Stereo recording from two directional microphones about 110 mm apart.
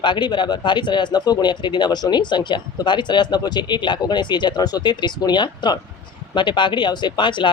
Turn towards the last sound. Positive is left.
turn(degrees=45)  # may be behind; listen again after turning